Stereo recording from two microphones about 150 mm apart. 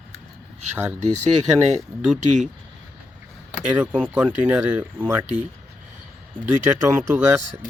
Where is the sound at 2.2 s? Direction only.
50° right (ahead or behind).